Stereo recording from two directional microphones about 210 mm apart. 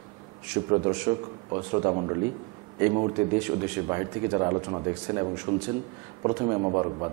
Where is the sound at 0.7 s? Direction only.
20° right (ahead or behind).